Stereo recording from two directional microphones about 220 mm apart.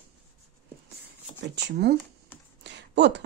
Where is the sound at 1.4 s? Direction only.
50° right (ahead or behind).